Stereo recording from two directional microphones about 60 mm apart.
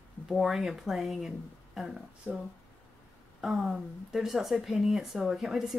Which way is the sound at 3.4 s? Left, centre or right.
Centre.